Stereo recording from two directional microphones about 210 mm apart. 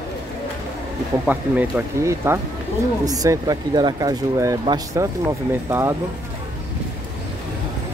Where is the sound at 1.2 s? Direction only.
10° right (ahead or behind).